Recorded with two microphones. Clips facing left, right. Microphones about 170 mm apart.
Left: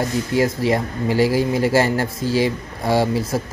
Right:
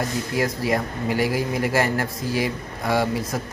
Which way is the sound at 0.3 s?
25° left (ahead or behind).